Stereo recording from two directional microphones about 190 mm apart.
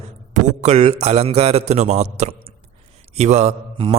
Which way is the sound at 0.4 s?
35° right (ahead or behind).